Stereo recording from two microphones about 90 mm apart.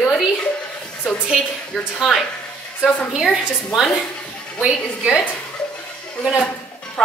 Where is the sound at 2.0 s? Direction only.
5° right (ahead or behind).